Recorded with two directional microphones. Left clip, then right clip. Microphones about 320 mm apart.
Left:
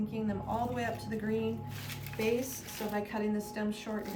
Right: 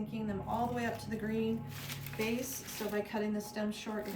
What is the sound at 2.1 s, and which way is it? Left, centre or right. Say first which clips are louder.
Speech: left 5 dB; centre.